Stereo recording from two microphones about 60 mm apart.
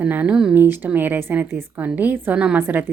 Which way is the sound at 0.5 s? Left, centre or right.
Right.